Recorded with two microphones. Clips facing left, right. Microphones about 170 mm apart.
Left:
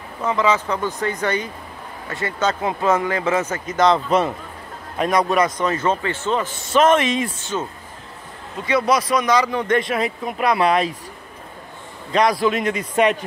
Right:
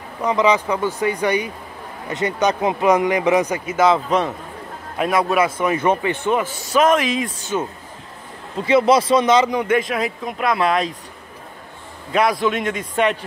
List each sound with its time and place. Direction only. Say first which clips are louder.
0.2 s speech: right 2 dB; 15° right (ahead or behind)
6.7 s speech: left 1 dB; centre (ahead or behind)
7.5 s speech: right 3 dB; 15° right (ahead or behind)
8.6 s speech: right 4 dB; 25° right (ahead or behind)
9.6 s speech: right 1 dB; 5° right (ahead or behind)
12.1 s speech: even; 5° right (ahead or behind)